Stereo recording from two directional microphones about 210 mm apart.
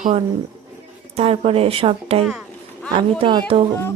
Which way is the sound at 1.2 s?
30° right (ahead or behind).